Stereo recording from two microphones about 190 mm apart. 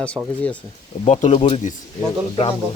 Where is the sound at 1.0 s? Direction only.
40° left (ahead or behind).